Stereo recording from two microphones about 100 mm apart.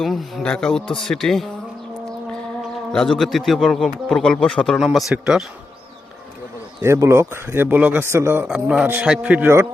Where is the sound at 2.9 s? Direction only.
5° left (ahead or behind).